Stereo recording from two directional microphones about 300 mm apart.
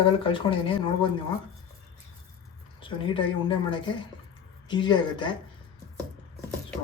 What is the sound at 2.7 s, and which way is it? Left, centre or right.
Speech, centre.